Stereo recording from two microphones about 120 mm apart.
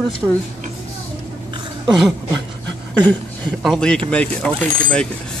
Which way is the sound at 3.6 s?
5° left (ahead or behind).